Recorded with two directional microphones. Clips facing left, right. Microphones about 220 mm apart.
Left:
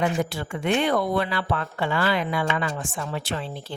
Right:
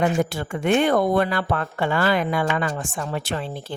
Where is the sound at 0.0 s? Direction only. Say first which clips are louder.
Right 3 dB; 50° right (ahead or behind).